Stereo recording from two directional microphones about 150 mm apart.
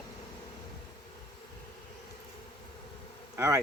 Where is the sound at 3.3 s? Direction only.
20° right (ahead or behind).